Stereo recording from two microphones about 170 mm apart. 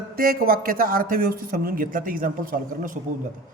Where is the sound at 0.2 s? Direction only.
60° right (ahead or behind).